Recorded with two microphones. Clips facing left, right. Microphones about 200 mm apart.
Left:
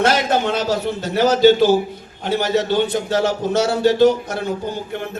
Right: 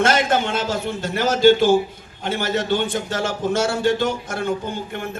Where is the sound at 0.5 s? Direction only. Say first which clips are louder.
Left 3 dB; 50° right (ahead or behind).